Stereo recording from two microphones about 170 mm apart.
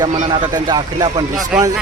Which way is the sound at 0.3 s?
25° right (ahead or behind).